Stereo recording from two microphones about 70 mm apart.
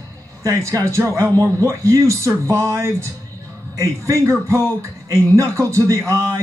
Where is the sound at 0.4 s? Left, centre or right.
Right.